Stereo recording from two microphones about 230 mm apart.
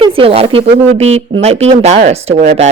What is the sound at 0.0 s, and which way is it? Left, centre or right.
Speech, right.